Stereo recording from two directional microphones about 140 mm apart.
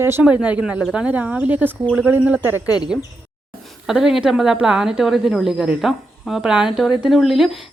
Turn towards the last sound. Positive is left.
turn(degrees=0)  # may be behind; listen again after turning